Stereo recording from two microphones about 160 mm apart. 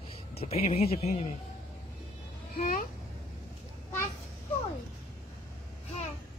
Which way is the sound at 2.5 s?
65° left (ahead or behind).